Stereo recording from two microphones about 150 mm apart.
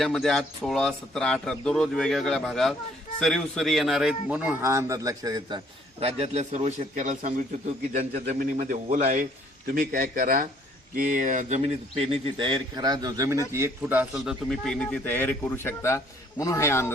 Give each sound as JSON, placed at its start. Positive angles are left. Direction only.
{"t": 0.0, "sound": "a man's voice", "side_deg": 0}
{"t": 6.0, "sound": "a man's voice", "side_deg": -40}
{"t": 9.7, "sound": "speech", "side_deg": -80}
{"t": 10.9, "sound": "a man's voice", "side_deg": -60}
{"t": 14.0, "sound": "a man's voice", "side_deg": -5}